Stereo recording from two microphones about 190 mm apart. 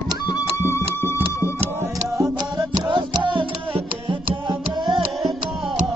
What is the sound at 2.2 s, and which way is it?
Music, 20° right (ahead or behind).